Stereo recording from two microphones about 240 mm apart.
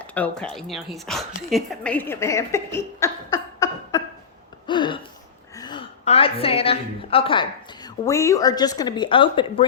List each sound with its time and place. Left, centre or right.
0.0 s a woman's voice: centre
4.6 s a sound: centre
5.5 s a woman's voice: centre